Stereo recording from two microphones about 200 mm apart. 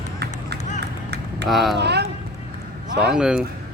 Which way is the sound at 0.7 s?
55° right (ahead or behind).